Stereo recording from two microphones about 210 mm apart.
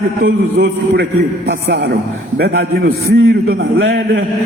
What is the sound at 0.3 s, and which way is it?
A man's voice, 50° right (ahead or behind).